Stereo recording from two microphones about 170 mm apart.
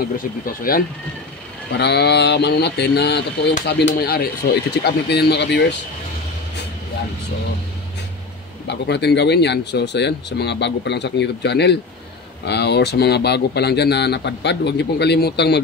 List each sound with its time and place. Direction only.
0.0 s speech: 60° left (ahead or behind)
1.7 s speech: 80° left; by 4.3 s 65° left (ahead or behind)
4.8 s speech: 75° left (ahead or behind)
8.6 s speech: 85° left